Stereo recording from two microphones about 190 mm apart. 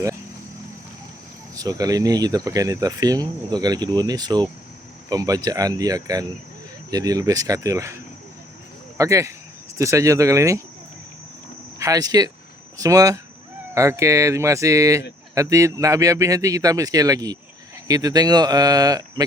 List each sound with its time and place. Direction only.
1.5 s a man's voice: 20° right (ahead or behind)
9.0 s a man's voice: 15° right (ahead or behind)
11.8 s a man's voice: 20° right (ahead or behind)